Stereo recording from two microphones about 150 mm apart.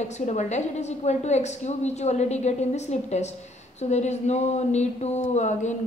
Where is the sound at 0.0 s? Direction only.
50° left (ahead or behind).